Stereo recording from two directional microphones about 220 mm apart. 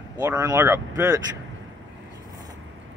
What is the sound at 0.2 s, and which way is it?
Speech, 15° right (ahead or behind).